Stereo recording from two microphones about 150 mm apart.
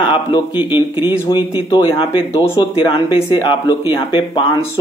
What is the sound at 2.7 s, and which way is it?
Speech, 35° left (ahead or behind).